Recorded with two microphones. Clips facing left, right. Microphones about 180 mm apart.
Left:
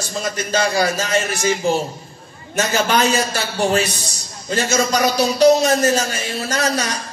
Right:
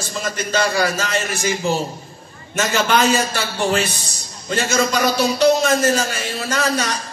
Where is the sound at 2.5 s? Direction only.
40° left (ahead or behind).